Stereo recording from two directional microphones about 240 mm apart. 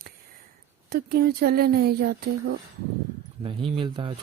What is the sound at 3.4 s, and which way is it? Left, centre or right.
Speech, right.